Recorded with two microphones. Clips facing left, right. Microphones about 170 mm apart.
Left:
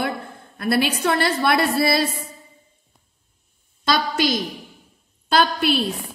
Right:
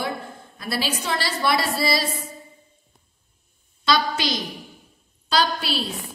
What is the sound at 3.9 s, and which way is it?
A woman's voice, 45° left (ahead or behind).